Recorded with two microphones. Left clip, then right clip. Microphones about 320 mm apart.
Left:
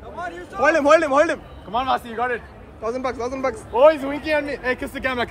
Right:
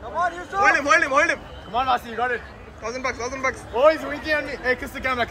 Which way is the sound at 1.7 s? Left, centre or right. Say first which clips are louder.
Even; left.